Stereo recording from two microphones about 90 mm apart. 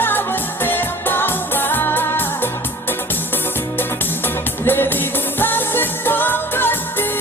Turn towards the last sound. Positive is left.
turn(degrees=25)  # may be behind; listen again after turning